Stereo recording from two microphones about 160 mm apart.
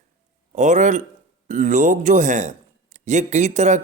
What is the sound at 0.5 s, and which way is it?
Speech, 50° right (ahead or behind).